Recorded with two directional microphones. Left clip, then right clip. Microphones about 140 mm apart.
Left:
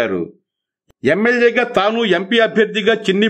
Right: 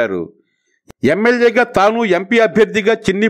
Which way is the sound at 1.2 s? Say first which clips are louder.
Right 3 dB; 45° right (ahead or behind).